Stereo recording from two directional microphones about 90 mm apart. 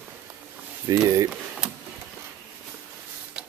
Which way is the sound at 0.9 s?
40° right (ahead or behind).